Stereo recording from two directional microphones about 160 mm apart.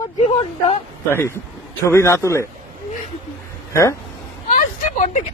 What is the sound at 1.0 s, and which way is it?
Speech, 15° left (ahead or behind).